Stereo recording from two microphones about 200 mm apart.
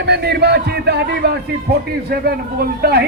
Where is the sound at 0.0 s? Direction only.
55° right (ahead or behind).